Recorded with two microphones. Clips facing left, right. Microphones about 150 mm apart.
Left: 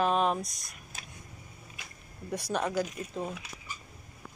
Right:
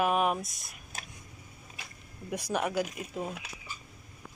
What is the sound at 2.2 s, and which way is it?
Speech, 10° right (ahead or behind).